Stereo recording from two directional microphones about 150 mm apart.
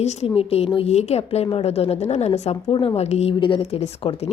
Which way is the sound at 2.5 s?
35° left (ahead or behind).